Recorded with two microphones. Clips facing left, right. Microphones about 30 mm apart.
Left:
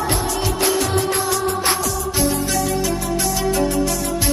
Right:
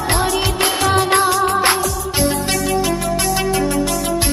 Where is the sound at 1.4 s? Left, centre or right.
Right.